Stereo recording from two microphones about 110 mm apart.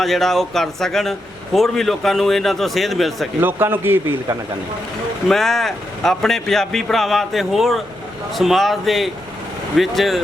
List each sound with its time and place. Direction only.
0.0 s a man's voice: centre (ahead or behind)
3.4 s speech: 20° right (ahead or behind)
5.3 s a man's voice: 5° left (ahead or behind)